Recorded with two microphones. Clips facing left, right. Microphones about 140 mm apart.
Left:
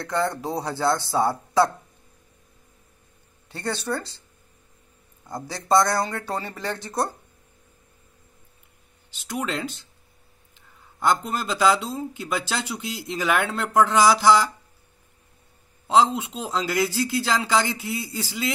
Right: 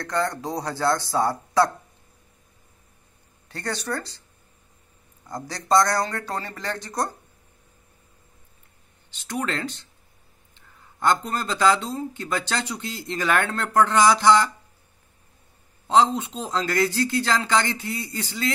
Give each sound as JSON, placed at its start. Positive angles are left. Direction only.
{"t": 0.3, "sound": "speech", "side_deg": 5}
{"t": 0.7, "sound": "speech", "side_deg": 20}
{"t": 3.4, "sound": "speech", "side_deg": 20}
{"t": 5.7, "sound": "speech", "side_deg": 25}
{"t": 6.0, "sound": "speech", "side_deg": 10}
{"t": 9.3, "sound": "speech", "side_deg": 10}
{"t": 11.0, "sound": "speech", "side_deg": 10}
{"t": 15.9, "sound": "speech", "side_deg": 5}